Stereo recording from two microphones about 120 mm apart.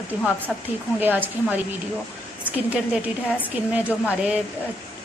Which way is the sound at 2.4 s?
10° right (ahead or behind).